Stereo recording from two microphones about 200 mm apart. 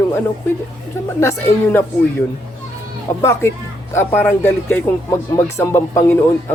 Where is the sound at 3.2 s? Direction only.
15° left (ahead or behind).